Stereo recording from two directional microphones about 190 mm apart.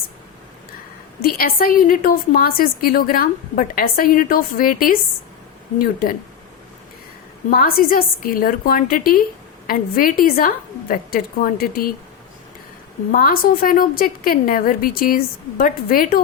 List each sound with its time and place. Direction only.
1.2 s a woman's voice: 50° left (ahead or behind)
7.5 s a woman's voice: 50° left (ahead or behind)
13.1 s a woman's voice: 50° left (ahead or behind)